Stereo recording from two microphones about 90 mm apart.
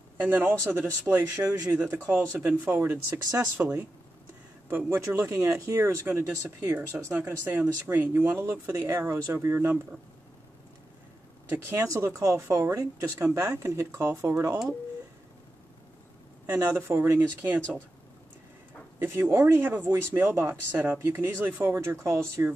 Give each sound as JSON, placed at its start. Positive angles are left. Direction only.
{"t": 0.2, "sound": "speech", "side_deg": -20}
{"t": 3.1, "sound": "speech", "side_deg": -40}
{"t": 3.5, "sound": "speech", "side_deg": -25}
{"t": 11.5, "sound": "speech", "side_deg": -30}
{"t": 16.8, "sound": "speech", "side_deg": -30}
{"t": 19.0, "sound": "speech", "side_deg": -25}